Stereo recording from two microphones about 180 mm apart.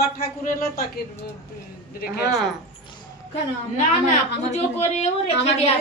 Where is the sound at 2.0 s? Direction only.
60° left (ahead or behind).